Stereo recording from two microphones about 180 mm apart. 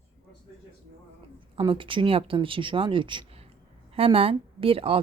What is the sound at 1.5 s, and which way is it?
A woman's voice, 30° right (ahead or behind).